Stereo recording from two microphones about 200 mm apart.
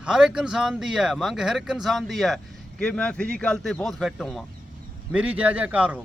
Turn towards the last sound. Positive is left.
turn(degrees=-5)  # may be behind; listen again after turning